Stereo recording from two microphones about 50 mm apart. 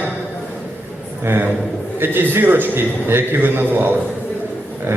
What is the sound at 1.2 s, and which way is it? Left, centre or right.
A man's voice, right.